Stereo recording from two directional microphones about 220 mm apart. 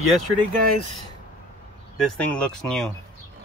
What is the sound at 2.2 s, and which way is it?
Speech, 5° left (ahead or behind).